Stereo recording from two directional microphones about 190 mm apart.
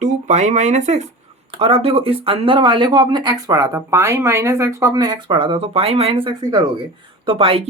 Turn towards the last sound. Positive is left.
turn(degrees=-30)  # may be behind; listen again after turning